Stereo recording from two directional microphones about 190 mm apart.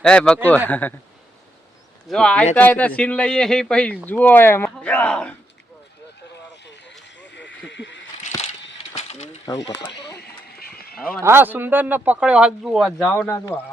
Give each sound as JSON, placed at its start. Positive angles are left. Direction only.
{"t": 0.0, "sound": "speech", "side_deg": 5}
{"t": 2.0, "sound": "speech", "side_deg": 5}
{"t": 6.5, "sound": "a sound", "side_deg": 65}
{"t": 9.0, "sound": "mechanisms", "side_deg": 35}
{"t": 9.5, "sound": "speech", "side_deg": 20}
{"t": 10.2, "sound": "a sound", "side_deg": 55}
{"t": 10.9, "sound": "speech", "side_deg": 5}
{"t": 11.2, "sound": "speech", "side_deg": -10}
{"t": 13.1, "sound": "speech", "side_deg": 10}